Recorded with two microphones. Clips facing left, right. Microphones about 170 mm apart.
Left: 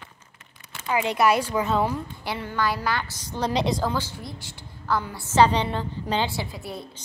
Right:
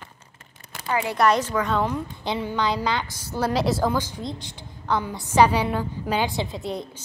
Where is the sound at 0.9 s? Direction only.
20° left (ahead or behind).